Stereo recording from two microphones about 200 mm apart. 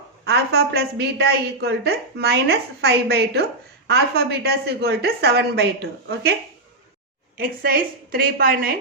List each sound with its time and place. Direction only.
0.3 s a woman's voice: 55° right (ahead or behind)
7.3 s a woman's voice: 45° right (ahead or behind)